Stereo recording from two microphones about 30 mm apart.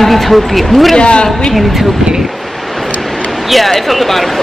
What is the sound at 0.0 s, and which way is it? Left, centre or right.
Speech, centre.